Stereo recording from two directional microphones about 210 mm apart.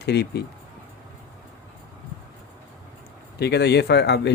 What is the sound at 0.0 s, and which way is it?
Speech, 50° left (ahead or behind).